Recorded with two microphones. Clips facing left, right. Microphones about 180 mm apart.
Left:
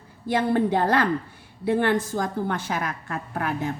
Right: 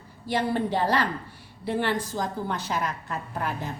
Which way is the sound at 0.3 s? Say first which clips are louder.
Left 4 dB; 55° left (ahead or behind).